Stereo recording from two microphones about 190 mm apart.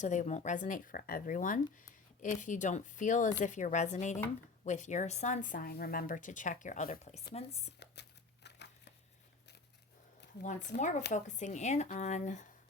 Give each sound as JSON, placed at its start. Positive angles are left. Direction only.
{"t": 0.0, "sound": "speech", "side_deg": 40}
{"t": 8.4, "sound": "a sound", "side_deg": 65}
{"t": 10.8, "sound": "speech", "side_deg": 40}